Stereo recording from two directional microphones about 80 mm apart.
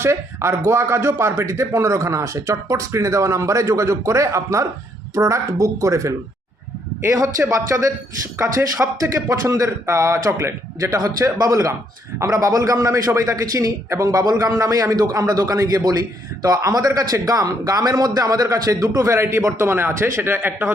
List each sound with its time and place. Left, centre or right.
0.0 s a man's voice: right